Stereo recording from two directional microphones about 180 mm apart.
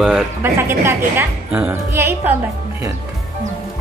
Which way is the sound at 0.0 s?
10° right (ahead or behind).